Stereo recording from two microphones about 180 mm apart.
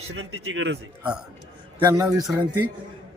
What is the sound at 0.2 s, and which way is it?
Speech, 85° right.